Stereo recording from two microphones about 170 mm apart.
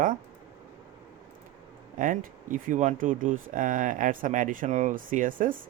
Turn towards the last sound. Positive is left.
turn(degrees=-55)  # may be behind; listen again after turning